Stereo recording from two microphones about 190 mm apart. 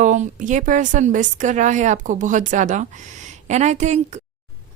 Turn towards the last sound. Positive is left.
turn(degrees=-35)  # may be behind; listen again after turning